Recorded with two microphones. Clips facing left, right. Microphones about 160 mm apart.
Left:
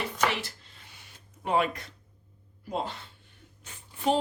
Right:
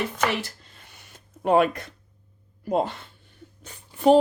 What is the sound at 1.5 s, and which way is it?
Speech, 50° right (ahead or behind).